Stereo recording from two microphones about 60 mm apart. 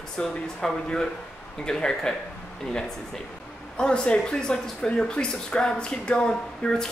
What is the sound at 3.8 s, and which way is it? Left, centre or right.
Speech, centre.